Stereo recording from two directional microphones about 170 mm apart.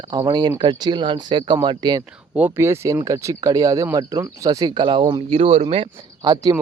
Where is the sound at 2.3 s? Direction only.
10° right (ahead or behind).